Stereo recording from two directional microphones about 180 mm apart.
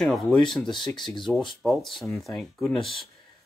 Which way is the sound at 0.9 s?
25° left (ahead or behind).